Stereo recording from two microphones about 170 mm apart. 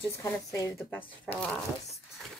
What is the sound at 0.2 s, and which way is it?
Speech, 20° left (ahead or behind).